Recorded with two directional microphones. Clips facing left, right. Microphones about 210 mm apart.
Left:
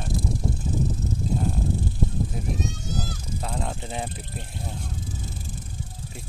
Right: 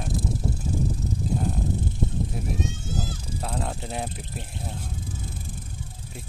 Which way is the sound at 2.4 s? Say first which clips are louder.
Left 1 dB; 5° right (ahead or behind).